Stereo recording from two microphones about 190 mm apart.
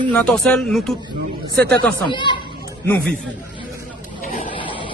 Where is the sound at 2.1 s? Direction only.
25° left (ahead or behind).